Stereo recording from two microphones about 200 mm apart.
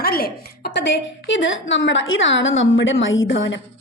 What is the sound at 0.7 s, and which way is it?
A woman's voice, 65° left (ahead or behind).